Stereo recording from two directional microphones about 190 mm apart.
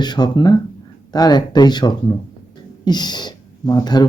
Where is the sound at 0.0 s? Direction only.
20° left (ahead or behind).